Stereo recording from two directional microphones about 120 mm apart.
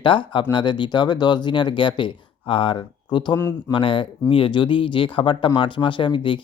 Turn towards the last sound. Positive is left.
turn(degrees=45)  # may be behind; listen again after turning